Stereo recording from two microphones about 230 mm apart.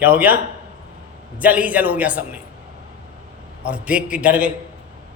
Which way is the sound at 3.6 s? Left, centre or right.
Centre.